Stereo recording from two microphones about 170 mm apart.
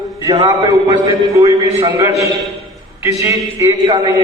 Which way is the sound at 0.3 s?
20° right (ahead or behind).